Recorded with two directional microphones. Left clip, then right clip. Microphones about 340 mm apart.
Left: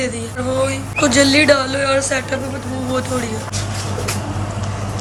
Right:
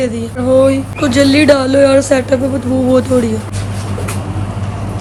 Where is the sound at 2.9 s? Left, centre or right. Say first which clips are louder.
Right 9 dB; centre.